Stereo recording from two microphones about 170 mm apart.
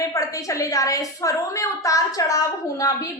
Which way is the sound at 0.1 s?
20° left (ahead or behind).